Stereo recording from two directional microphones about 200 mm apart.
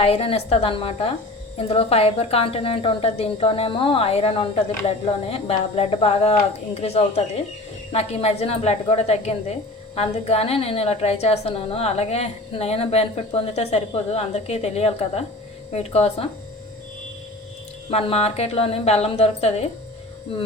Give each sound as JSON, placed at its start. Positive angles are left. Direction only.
{"t": 0.0, "sound": "a woman's voice", "side_deg": 30}
{"t": 17.9, "sound": "a woman's voice", "side_deg": 30}